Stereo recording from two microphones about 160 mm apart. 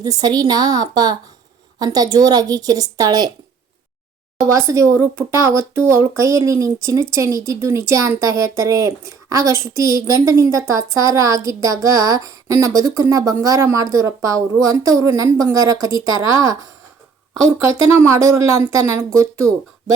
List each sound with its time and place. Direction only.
0.0 s speech: 25° right (ahead or behind)
4.4 s speech: 20° right (ahead or behind)